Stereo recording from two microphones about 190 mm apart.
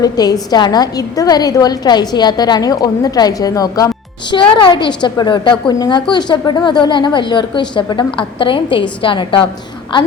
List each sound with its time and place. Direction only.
0.0 s a woman's voice: 20° left (ahead or behind)